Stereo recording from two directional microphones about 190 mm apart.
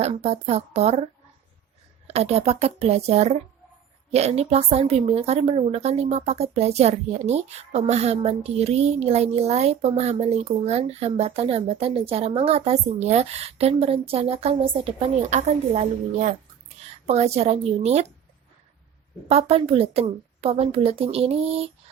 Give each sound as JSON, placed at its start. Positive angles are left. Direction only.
{"t": 0.0, "sound": "a woman's voice", "side_deg": -35}
{"t": 2.0, "sound": "a woman's voice", "side_deg": -35}
{"t": 19.3, "sound": "a woman's voice", "side_deg": -30}